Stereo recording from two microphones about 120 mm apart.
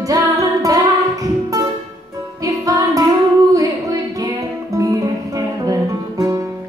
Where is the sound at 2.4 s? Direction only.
25° right (ahead or behind).